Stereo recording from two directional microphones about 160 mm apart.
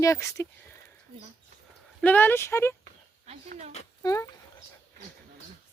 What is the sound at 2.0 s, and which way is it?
Speech, 10° left (ahead or behind).